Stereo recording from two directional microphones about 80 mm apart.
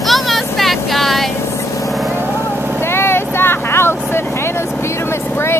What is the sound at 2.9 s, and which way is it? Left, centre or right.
Vehicle, left.